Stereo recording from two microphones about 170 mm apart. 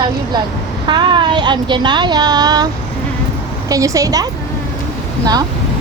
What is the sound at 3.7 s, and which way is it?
Speech, 20° right (ahead or behind).